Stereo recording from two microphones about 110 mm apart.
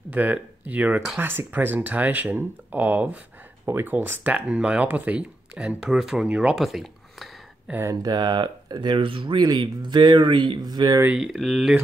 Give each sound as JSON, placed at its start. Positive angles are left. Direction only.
{"t": 0.1, "sound": "speech", "side_deg": -15}
{"t": 7.8, "sound": "speech", "side_deg": -35}
{"t": 11.1, "sound": "speech", "side_deg": 0}